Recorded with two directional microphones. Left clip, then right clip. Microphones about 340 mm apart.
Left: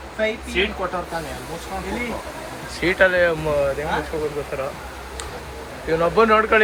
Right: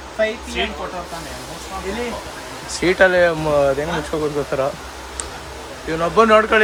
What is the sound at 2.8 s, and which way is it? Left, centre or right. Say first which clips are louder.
A man's voice: right 3 dB; centre.